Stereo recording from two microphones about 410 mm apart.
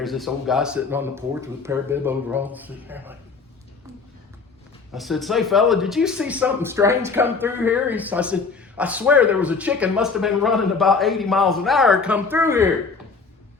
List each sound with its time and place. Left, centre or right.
0.0 s speech: centre
4.9 s speech: centre